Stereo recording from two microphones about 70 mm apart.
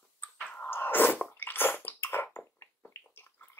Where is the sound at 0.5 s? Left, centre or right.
Left.